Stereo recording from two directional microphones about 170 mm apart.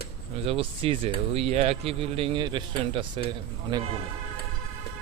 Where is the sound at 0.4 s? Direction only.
35° right (ahead or behind).